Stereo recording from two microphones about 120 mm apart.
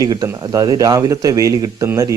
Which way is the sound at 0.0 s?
30° right (ahead or behind).